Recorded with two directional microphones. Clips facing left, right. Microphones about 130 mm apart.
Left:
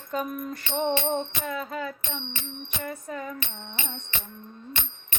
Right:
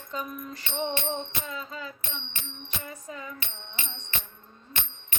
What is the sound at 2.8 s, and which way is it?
Music, 55° left (ahead or behind).